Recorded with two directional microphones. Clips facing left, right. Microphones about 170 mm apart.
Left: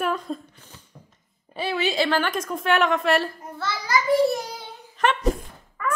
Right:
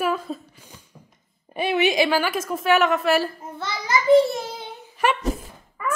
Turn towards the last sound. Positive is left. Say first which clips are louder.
# even
turn(degrees=-10)  # may be behind; listen again after turning